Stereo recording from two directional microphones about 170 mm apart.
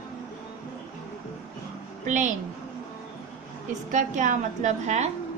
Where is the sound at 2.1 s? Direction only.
50° right (ahead or behind).